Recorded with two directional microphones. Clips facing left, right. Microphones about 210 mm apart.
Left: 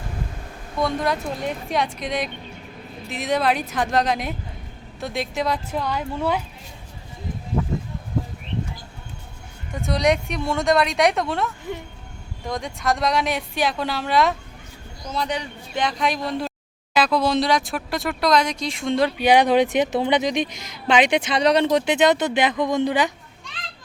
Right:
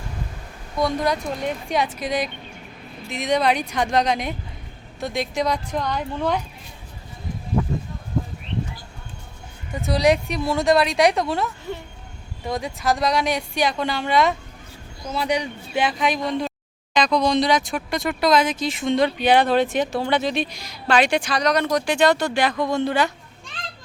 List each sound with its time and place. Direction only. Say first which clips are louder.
0.8 s speech: right 1 dB; centre (ahead or behind)
9.7 s speech: right 2 dB; centre (ahead or behind)
15.1 s speech: right 3 dB; 10° right (ahead or behind); by 23.1 s 15° left (ahead or behind)